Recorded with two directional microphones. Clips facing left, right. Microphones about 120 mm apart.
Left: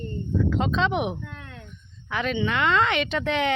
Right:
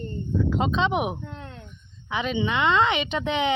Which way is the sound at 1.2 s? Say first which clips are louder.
Right 2 dB; 25° right (ahead or behind).